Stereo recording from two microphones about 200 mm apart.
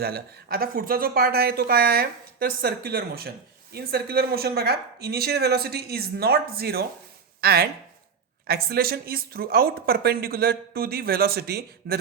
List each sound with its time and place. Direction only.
0.0 s speech: 50° right (ahead or behind)